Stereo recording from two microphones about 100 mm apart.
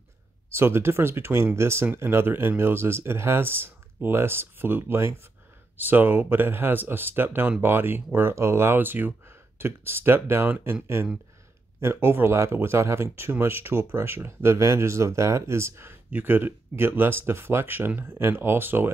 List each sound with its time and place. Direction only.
0.5 s speech: 25° right (ahead or behind)